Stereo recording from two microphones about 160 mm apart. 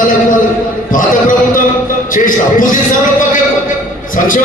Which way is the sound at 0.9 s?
55° left (ahead or behind).